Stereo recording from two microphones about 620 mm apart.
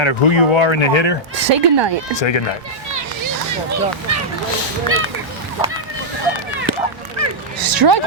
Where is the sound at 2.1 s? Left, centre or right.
Left.